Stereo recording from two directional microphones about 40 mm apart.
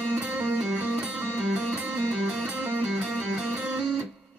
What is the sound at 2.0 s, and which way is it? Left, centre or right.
Music, right.